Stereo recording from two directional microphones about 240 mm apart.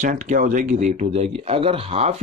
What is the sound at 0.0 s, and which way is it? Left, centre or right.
Speech, right.